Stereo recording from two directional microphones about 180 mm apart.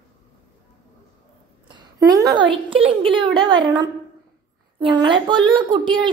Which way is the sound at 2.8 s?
30° right (ahead or behind).